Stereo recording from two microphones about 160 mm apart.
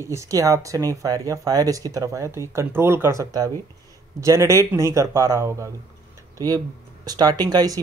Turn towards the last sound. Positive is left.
turn(degrees=-25)  # may be behind; listen again after turning